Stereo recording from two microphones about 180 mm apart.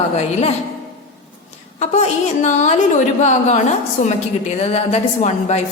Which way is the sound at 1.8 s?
40° left (ahead or behind).